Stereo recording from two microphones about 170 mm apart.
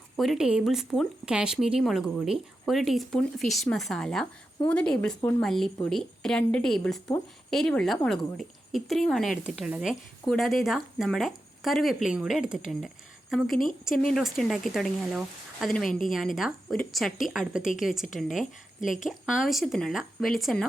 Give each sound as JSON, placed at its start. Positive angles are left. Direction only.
{"t": 0.2, "sound": "speech", "side_deg": 0}
{"t": 14.1, "sound": "speech", "side_deg": 0}
{"t": 18.8, "sound": "a woman's voice", "side_deg": 50}
{"t": 19.0, "sound": "speech", "side_deg": 0}